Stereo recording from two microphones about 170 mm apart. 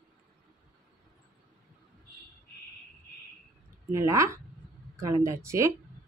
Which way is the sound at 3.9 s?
15° right (ahead or behind).